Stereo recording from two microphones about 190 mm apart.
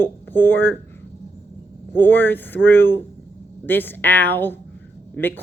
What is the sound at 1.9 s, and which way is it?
Speech, 10° left (ahead or behind).